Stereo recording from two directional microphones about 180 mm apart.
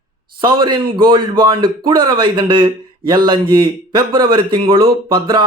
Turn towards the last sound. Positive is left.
turn(degrees=-25)  # may be behind; listen again after turning